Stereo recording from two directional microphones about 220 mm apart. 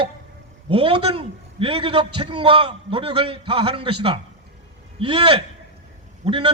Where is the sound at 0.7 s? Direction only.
25° right (ahead or behind).